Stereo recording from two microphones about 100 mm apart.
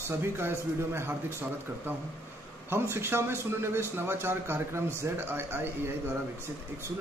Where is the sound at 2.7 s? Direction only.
25° right (ahead or behind).